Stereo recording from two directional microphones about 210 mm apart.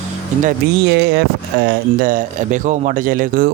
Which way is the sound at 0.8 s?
50° right (ahead or behind).